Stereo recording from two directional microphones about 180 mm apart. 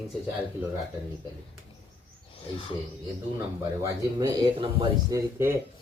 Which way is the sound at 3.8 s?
20° right (ahead or behind).